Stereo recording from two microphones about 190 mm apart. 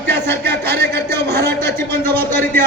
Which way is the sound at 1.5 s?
10° left (ahead or behind).